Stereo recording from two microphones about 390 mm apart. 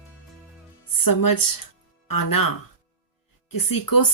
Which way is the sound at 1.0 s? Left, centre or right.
Left.